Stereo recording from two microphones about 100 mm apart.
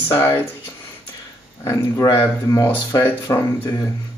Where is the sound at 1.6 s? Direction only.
35° left (ahead or behind).